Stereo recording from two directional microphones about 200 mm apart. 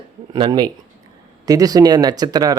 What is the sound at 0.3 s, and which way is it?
Speech, 20° right (ahead or behind).